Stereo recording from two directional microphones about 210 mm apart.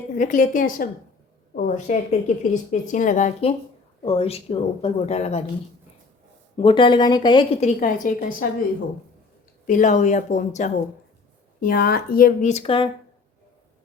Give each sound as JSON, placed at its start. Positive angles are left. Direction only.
{"t": 0.1, "sound": "a woman's voice", "side_deg": 40}
{"t": 6.6, "sound": "a woman's voice", "side_deg": 25}
{"t": 9.6, "sound": "speech", "side_deg": 35}